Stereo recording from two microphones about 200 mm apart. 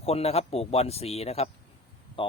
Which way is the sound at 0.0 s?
30° left (ahead or behind).